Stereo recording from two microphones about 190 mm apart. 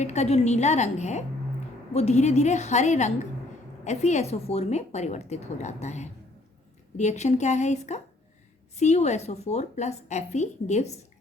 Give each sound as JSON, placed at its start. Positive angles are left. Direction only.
{"t": 0.0, "sound": "a woman's voice", "side_deg": 35}